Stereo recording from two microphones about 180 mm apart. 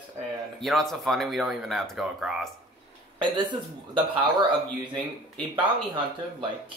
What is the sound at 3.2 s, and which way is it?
Speech, 25° right (ahead or behind).